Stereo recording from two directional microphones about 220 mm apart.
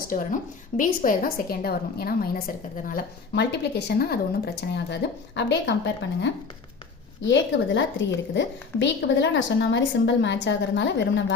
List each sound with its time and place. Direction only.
0.1 s a woman's voice: 35° left (ahead or behind); by 11.3 s 50° left (ahead or behind)